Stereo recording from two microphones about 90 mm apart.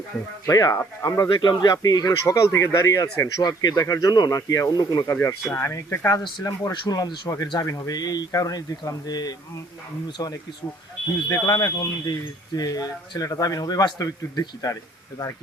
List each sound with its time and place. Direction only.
0.4 s speech: 40° left (ahead or behind)
1.3 s speech: 55° left (ahead or behind)
5.5 s speech: 30° left (ahead or behind)
6.4 s speech: 45° left (ahead or behind)